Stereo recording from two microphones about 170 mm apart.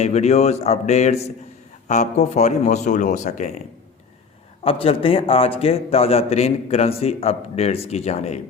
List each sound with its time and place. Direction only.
0.0 s a man's voice: 40° left (ahead or behind)
4.6 s a man's voice: 35° left (ahead or behind)